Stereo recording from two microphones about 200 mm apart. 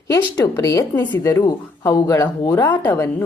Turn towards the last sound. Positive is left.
turn(degrees=10)  # may be behind; listen again after turning